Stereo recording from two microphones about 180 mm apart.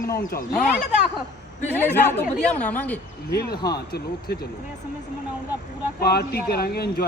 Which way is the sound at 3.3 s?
65° left (ahead or behind).